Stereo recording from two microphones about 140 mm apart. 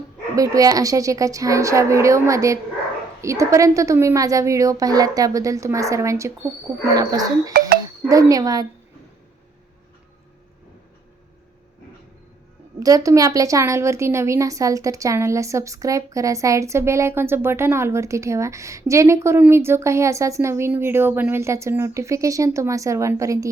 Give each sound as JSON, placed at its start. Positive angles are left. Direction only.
{"t": 0.3, "sound": "a woman's voice", "side_deg": -25}
{"t": 12.8, "sound": "a woman's voice", "side_deg": -25}